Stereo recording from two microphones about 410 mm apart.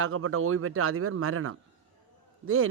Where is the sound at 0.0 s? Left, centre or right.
Right.